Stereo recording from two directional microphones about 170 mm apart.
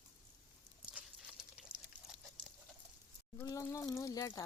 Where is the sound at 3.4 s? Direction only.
20° left (ahead or behind).